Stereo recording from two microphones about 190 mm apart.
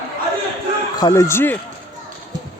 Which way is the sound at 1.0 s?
20° left (ahead or behind).